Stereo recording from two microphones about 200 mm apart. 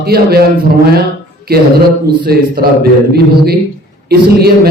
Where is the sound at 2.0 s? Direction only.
50° right (ahead or behind).